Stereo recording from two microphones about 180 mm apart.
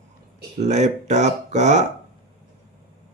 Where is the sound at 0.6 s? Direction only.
40° right (ahead or behind).